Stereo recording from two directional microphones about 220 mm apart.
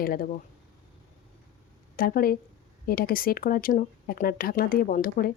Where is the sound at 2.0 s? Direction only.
40° left (ahead or behind).